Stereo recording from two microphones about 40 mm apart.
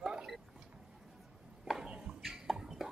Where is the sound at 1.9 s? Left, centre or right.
Right.